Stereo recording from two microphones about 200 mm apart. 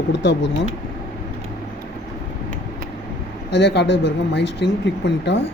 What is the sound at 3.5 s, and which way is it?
Speech, 60° left (ahead or behind).